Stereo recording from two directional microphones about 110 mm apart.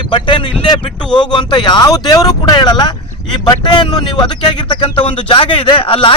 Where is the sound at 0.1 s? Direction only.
50° left (ahead or behind).